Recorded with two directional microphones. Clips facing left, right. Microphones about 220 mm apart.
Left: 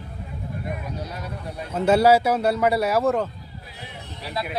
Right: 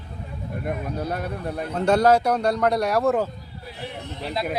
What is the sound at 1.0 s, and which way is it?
Speech, 55° right (ahead or behind).